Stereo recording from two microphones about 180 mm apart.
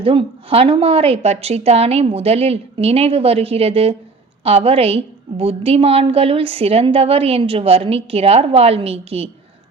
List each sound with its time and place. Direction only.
0.0 s a woman's voice: 30° right (ahead or behind)